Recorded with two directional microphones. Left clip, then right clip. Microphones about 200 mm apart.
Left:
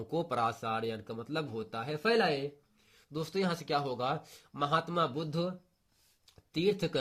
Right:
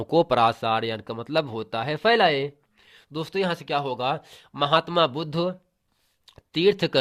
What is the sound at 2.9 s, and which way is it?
Speech, 40° right (ahead or behind).